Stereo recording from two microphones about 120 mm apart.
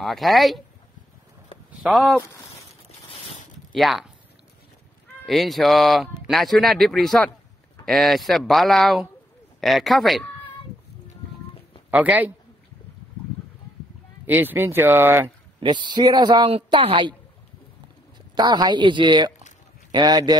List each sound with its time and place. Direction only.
0.0 s speech: centre (ahead or behind)
1.8 s speech: centre (ahead or behind)
3.1 s a sound: 55° left (ahead or behind)
3.7 s speech: centre (ahead or behind)
5.2 s speech: centre (ahead or behind)
11.9 s speech: 15° right (ahead or behind)
14.2 s speech: 15° right (ahead or behind)
15.6 s speech: 40° right (ahead or behind)
16.4 s a woman's voice: 55° right (ahead or behind)
18.3 s speech: 35° right (ahead or behind)